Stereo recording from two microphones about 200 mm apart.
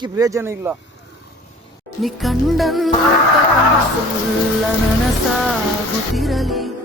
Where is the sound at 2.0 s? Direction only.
Centre (ahead or behind).